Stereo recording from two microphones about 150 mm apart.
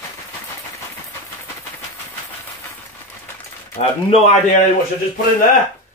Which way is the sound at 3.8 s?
45° left (ahead or behind).